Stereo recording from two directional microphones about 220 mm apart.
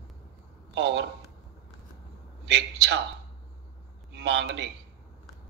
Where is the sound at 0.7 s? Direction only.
55° right (ahead or behind).